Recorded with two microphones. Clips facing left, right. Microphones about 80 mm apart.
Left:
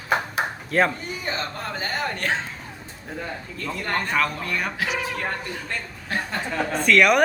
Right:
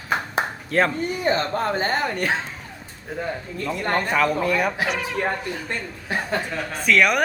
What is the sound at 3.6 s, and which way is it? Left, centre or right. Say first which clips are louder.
Speech: right 4 dB; centre.